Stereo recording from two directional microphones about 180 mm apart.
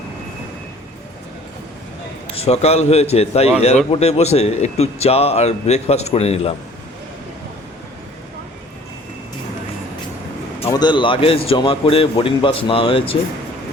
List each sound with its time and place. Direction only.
2.3 s speech: 35° left (ahead or behind)
10.7 s a man's voice: 25° left (ahead or behind)